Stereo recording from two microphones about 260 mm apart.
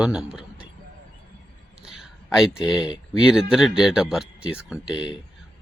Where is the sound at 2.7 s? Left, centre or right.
Centre.